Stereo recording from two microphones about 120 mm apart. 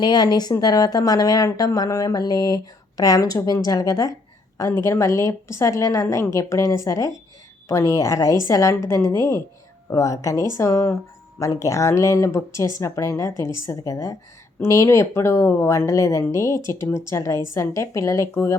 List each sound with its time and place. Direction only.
0.0 s speech: 35° left (ahead or behind)